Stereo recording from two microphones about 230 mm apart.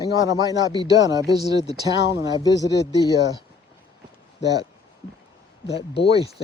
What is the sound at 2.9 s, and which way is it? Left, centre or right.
Speech, centre.